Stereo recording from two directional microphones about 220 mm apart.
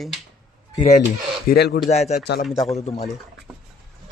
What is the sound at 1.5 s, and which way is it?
Speech, 45° left (ahead or behind).